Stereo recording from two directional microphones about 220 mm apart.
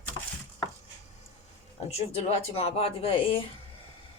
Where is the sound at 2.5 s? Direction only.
25° left (ahead or behind).